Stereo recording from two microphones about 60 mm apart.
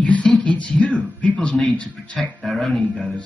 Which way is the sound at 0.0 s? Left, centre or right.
Left.